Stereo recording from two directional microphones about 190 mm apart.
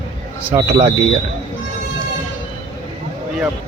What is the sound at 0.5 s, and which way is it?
Speech, 30° right (ahead or behind).